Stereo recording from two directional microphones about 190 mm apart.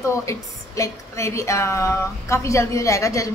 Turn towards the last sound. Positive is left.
turn(degrees=15)  # may be behind; listen again after turning